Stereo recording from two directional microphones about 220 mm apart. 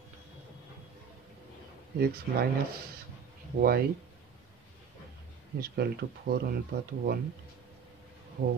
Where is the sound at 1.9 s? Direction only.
45° right (ahead or behind).